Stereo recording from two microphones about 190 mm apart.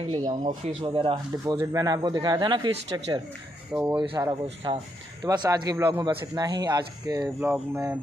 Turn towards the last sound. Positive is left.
turn(degrees=-10)  # may be behind; listen again after turning